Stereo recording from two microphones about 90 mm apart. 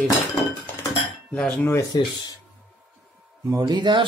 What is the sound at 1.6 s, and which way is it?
Speech, 30° left (ahead or behind).